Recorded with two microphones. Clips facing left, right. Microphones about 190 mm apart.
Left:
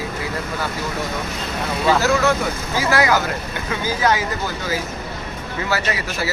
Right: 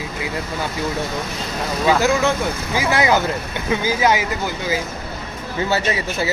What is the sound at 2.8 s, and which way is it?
Speech, 20° right (ahead or behind).